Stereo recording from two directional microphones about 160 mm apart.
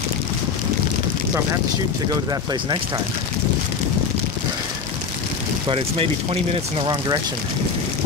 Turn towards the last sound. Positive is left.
turn(degrees=-30)  # may be behind; listen again after turning